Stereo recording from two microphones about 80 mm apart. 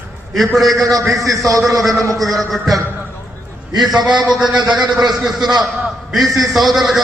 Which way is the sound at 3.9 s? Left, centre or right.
Centre.